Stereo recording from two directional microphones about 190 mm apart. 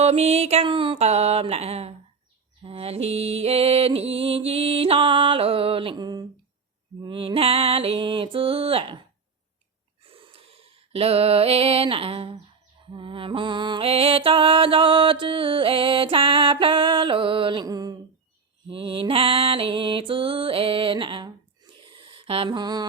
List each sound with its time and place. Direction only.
0.0 s music: 35° right (ahead or behind)
7.0 s a sound: 25° right (ahead or behind)
12.9 s music: 25° right (ahead or behind)